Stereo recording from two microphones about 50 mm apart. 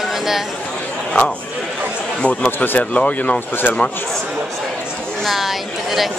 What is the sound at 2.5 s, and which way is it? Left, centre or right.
Speech, left.